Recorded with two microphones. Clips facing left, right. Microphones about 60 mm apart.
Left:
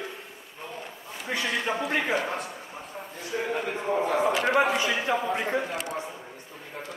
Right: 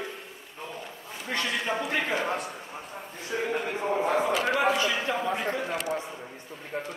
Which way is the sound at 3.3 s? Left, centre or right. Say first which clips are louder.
Even; right.